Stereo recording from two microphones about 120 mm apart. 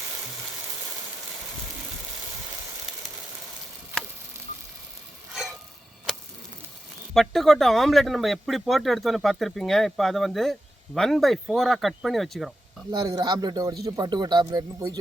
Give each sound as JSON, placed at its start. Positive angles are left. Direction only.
{"t": 5.3, "sound": "a sound", "side_deg": -5}
{"t": 7.1, "sound": "speech", "side_deg": 5}
{"t": 12.9, "sound": "a man's voice", "side_deg": -35}